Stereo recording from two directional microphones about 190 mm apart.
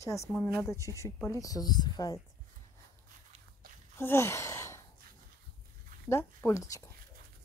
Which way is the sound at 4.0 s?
15° left (ahead or behind).